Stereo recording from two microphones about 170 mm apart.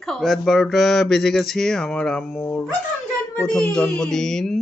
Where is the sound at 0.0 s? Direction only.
Centre (ahead or behind).